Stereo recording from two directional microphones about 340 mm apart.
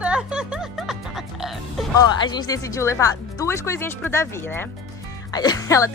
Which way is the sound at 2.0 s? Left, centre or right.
Centre.